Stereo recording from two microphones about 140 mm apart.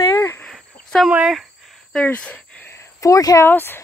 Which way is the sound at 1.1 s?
5° right (ahead or behind).